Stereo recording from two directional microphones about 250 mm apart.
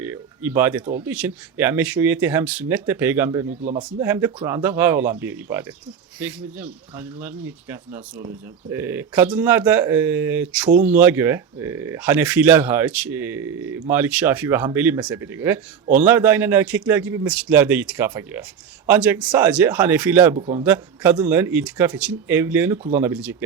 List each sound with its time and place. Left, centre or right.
0.0 s speech: centre
3.6 s speech: right
3.8 s speech: centre